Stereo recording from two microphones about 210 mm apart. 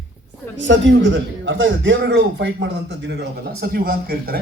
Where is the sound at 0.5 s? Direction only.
60° right (ahead or behind).